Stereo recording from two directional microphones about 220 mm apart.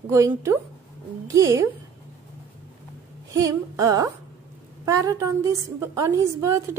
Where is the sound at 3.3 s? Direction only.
15° right (ahead or behind).